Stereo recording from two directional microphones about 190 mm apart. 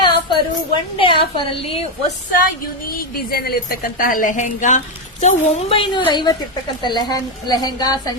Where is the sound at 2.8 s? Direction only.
50° left (ahead or behind).